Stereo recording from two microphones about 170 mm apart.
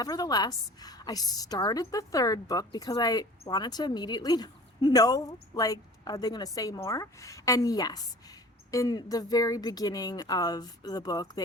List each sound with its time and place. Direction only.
0.0 s a woman's voice: 20° left (ahead or behind)